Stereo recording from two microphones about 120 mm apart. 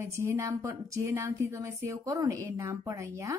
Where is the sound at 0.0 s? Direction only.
25° right (ahead or behind).